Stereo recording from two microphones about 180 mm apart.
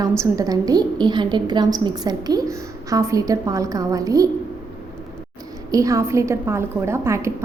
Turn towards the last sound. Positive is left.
turn(degrees=-15)  # may be behind; listen again after turning